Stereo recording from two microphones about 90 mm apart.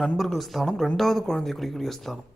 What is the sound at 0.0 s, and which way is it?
Speech, centre (ahead or behind).